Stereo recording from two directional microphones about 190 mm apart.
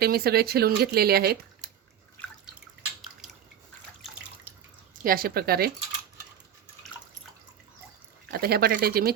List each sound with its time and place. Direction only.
0.0 s speech: 55° right (ahead or behind)
5.0 s speech: 50° right (ahead or behind)
8.3 s speech: 55° right (ahead or behind)